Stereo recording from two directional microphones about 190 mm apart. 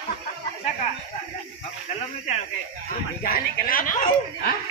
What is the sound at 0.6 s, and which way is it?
Speech, 35° left (ahead or behind).